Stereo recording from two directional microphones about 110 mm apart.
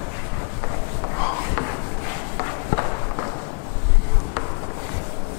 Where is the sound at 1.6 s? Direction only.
10° left (ahead or behind).